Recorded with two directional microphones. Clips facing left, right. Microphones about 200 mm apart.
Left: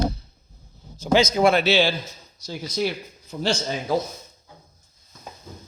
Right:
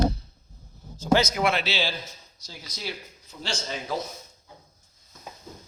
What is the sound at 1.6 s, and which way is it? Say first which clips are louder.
A man's voice: left 9 dB; 65° left (ahead or behind).